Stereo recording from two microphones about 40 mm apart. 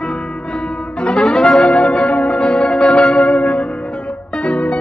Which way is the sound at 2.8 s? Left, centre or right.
Left.